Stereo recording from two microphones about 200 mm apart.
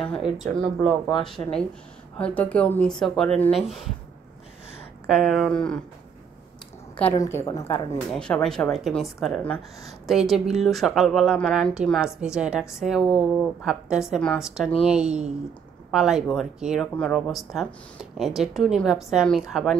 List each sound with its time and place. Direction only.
0.6 s speech: centre (ahead or behind)
5.0 s speech: centre (ahead or behind)
7.0 s a woman's voice: 10° left (ahead or behind)
8.1 s speech: 5° left (ahead or behind)